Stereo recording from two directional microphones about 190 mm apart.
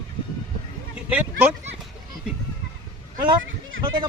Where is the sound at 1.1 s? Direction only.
10° right (ahead or behind).